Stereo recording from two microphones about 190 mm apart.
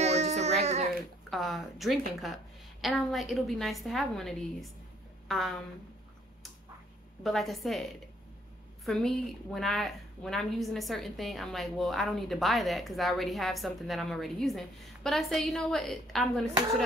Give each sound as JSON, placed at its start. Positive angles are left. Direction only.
{"t": 0.0, "sound": "music", "side_deg": -35}
{"t": 1.3, "sound": "a woman's voice", "side_deg": 0}
{"t": 7.2, "sound": "a woman's voice", "side_deg": 0}